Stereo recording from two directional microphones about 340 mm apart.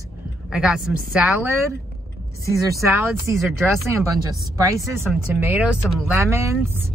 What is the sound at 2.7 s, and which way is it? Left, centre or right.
Speech, centre.